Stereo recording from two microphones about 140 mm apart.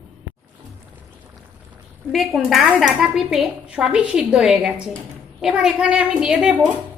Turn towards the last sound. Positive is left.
turn(degrees=-10)  # may be behind; listen again after turning